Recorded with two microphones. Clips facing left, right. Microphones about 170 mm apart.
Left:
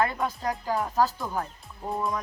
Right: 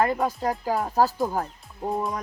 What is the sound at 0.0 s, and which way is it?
Speech, 40° right (ahead or behind).